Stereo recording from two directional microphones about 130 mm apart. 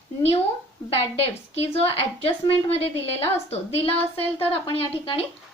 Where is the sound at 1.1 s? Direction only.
50° left (ahead or behind).